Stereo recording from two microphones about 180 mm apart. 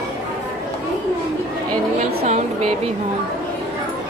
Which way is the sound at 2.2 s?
40° right (ahead or behind).